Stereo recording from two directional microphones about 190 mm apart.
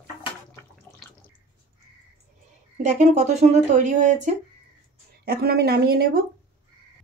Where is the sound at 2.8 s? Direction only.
35° right (ahead or behind).